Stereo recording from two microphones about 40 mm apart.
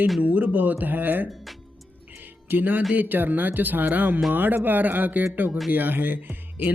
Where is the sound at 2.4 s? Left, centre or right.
Right.